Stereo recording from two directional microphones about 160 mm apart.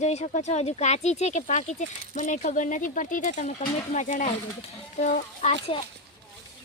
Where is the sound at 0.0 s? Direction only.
45° left (ahead or behind).